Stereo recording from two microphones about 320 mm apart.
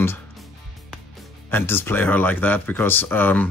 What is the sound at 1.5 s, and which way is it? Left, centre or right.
Speech, centre.